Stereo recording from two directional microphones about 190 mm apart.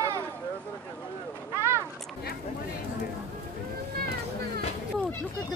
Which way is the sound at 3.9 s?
55° right (ahead or behind).